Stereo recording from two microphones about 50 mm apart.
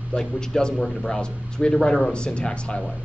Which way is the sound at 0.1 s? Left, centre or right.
Centre.